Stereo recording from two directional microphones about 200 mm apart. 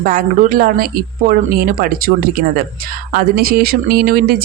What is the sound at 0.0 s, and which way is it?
Speech, 45° right (ahead or behind).